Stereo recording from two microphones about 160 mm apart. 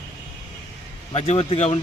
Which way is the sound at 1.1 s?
40° left (ahead or behind).